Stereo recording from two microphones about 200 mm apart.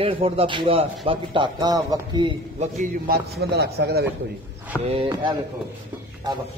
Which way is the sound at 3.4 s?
55° right (ahead or behind).